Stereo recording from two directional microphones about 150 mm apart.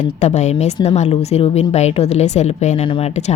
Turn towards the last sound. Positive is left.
turn(degrees=40)  # may be behind; listen again after turning